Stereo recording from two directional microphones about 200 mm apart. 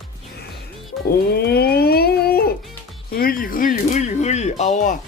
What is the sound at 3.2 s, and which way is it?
Speech, 45° left (ahead or behind).